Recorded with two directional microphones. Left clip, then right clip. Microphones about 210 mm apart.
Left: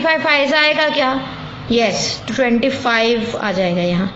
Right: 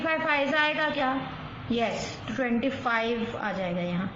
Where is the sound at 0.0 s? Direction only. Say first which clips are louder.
Left 11 dB; 45° left (ahead or behind).